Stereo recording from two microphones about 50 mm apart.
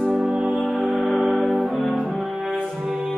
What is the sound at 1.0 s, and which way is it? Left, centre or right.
Music, right.